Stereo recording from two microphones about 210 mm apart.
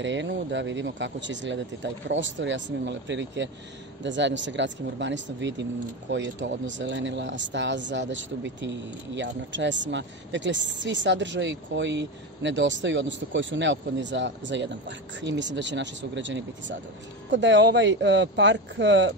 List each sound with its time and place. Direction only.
0.0 s speech: 60° right (ahead or behind)